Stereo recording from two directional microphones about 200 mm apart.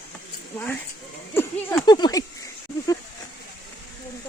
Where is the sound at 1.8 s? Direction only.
20° left (ahead or behind).